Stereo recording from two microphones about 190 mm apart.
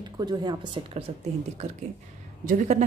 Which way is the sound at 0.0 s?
20° right (ahead or behind).